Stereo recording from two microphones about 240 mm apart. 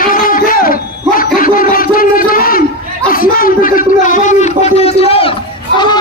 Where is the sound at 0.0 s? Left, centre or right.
Left.